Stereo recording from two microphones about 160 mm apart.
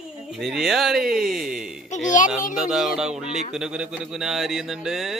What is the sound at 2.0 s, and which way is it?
Speech, 55° left (ahead or behind).